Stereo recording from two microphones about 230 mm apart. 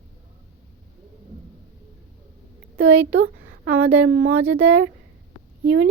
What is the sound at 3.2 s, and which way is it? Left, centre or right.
A woman's voice, right.